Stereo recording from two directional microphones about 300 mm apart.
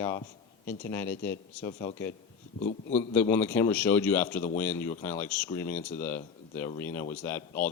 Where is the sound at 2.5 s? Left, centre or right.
Left.